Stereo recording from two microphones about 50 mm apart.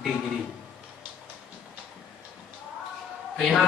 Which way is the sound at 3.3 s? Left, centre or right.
Centre.